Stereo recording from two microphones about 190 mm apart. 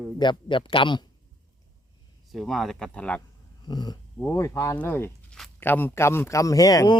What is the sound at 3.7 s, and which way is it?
Speech, 20° left (ahead or behind).